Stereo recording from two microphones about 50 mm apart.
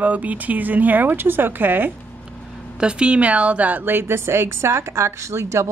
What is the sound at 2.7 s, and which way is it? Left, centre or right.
A woman's voice, centre.